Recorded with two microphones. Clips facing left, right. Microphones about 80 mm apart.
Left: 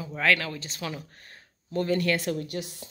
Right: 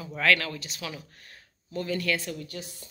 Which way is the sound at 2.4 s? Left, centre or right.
Left.